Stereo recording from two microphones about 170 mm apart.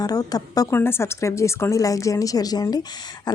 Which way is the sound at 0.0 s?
20° left (ahead or behind).